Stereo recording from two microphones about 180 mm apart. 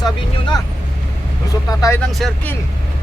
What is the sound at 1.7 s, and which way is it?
Speech, 20° left (ahead or behind).